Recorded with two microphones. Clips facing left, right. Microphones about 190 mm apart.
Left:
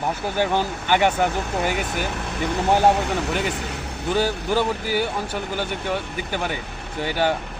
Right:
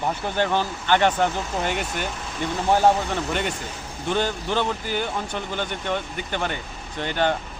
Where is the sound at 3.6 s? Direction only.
70° left (ahead or behind).